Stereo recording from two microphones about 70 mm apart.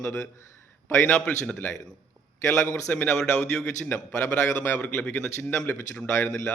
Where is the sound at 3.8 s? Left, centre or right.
Left.